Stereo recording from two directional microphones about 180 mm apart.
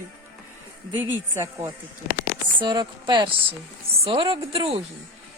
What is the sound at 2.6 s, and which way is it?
A woman's voice, 25° right (ahead or behind).